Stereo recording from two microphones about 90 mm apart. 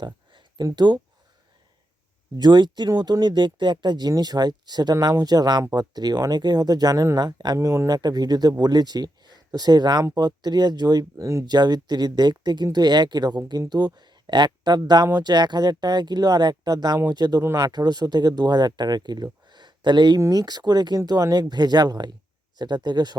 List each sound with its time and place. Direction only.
0.0 s speech: 55° right (ahead or behind)
2.3 s speech: 55° right (ahead or behind)
17.4 s speech: 30° right (ahead or behind)
17.7 s speech: 45° right (ahead or behind)
20.1 s speech: 40° right (ahead or behind)